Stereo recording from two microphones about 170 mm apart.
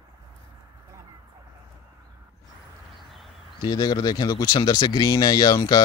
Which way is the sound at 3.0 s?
Centre (ahead or behind).